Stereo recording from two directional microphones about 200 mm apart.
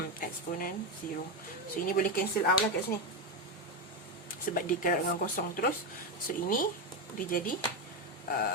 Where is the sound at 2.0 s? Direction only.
45° left (ahead or behind).